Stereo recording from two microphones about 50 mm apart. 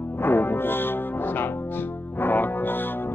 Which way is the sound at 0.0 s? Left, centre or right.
Left.